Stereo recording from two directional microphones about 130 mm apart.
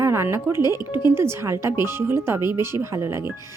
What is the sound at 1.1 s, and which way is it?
Speech, 20° right (ahead or behind).